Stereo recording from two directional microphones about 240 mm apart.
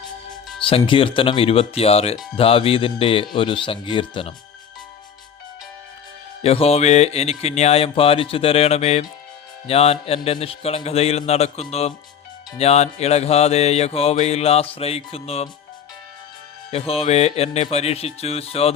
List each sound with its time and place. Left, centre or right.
0.6 s mantra: left
6.4 s mantra: left
16.7 s mantra: left